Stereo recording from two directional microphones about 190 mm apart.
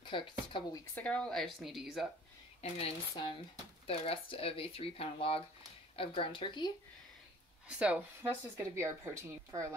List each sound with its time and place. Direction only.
0.0 s speech: 25° left (ahead or behind)
0.9 s speech: 5° left (ahead or behind)
2.6 s speech: 30° left (ahead or behind)
7.6 s speech: 5° right (ahead or behind)